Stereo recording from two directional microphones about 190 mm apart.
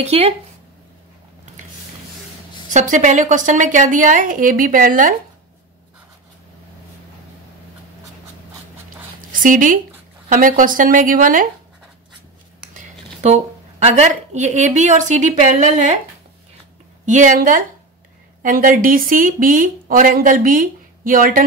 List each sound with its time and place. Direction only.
0.0 s speech: 35° right (ahead or behind)
2.7 s speech: 40° right (ahead or behind)
9.3 s speech: 45° right (ahead or behind)
13.2 s speech: 35° right (ahead or behind)
17.0 s speech: 40° right (ahead or behind)